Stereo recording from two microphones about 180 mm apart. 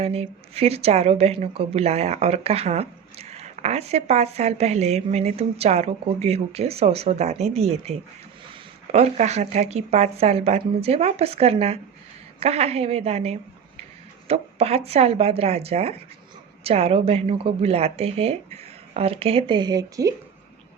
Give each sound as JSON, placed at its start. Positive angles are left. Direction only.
{"t": 0.0, "sound": "a woman's voice", "side_deg": -35}